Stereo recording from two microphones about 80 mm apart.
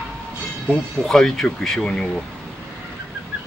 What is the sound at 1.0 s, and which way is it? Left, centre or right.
Speech, centre.